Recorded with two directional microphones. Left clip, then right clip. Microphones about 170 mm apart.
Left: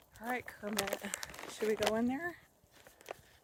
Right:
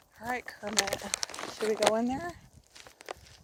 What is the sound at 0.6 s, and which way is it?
Speech, 20° right (ahead or behind).